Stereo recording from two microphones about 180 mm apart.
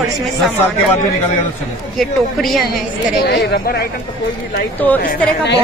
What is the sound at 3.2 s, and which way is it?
Speech, 65° left (ahead or behind).